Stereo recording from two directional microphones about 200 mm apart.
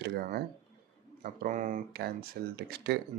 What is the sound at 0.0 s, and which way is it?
Speech, 55° right (ahead or behind).